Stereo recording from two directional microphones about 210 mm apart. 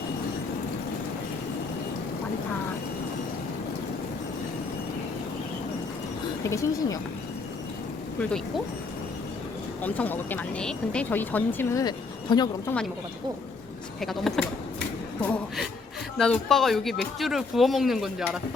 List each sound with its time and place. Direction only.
6.4 s speech: 15° left (ahead or behind)
8.2 s speech: 5° left (ahead or behind)
9.8 s speech: 10° left (ahead or behind)
14.0 s speech: centre (ahead or behind)